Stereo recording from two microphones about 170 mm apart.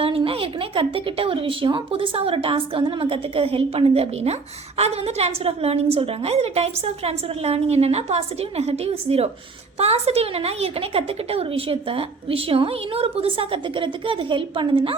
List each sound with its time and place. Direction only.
0.0 s a woman's voice: 35° right (ahead or behind)